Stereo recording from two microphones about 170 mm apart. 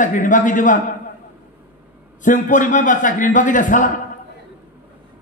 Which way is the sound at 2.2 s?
50° left (ahead or behind).